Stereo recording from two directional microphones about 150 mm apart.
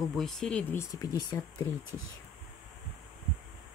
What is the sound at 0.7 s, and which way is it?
Speech, 20° left (ahead or behind).